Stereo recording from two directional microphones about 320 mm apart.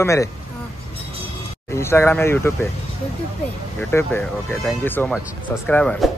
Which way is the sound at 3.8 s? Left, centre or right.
Centre.